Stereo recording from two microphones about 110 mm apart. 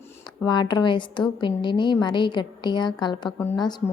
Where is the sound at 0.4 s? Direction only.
40° left (ahead or behind).